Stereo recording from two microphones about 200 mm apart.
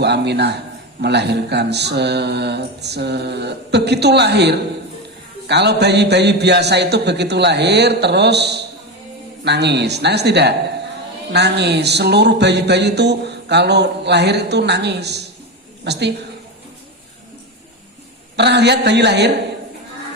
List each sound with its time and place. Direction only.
0.0 s speech: 55° right (ahead or behind)
18.3 s speech: 55° right (ahead or behind)